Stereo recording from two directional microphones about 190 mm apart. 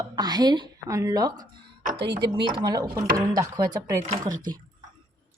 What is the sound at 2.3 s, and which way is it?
A woman's voice, 25° right (ahead or behind).